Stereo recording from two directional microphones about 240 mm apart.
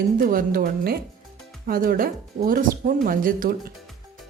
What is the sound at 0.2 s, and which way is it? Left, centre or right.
Speech, right.